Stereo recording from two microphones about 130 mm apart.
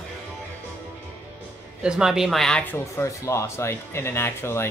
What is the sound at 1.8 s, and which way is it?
Speech, 5° right (ahead or behind).